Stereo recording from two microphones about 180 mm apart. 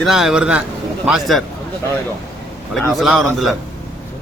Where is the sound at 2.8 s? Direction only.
Centre (ahead or behind).